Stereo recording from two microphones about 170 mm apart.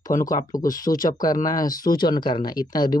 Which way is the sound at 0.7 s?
20° left (ahead or behind).